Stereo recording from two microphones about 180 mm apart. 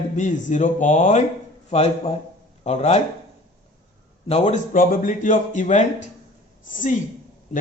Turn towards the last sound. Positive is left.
turn(degrees=45)  # may be behind; listen again after turning